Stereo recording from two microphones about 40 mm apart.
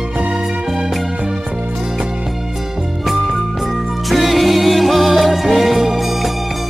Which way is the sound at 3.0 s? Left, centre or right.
Centre.